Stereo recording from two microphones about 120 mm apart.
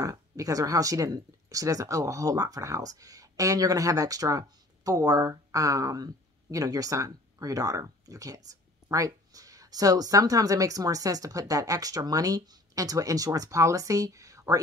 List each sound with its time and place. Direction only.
0.0 s speech: 30° right (ahead or behind)